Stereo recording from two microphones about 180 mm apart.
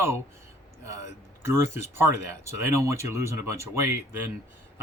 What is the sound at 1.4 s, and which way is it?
Speech, 15° right (ahead or behind).